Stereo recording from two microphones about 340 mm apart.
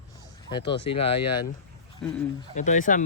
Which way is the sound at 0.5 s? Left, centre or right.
Centre.